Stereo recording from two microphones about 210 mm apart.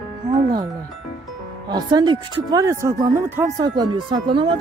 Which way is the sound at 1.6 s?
20° right (ahead or behind).